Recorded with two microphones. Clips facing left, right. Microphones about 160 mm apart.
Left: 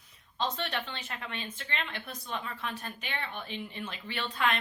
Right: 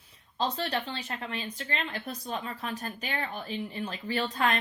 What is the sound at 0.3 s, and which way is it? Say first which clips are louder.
Speech: right 3 dB; 35° right (ahead or behind).